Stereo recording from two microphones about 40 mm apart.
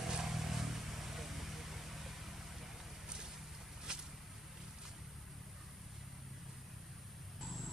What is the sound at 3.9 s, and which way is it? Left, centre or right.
Vehicle, centre.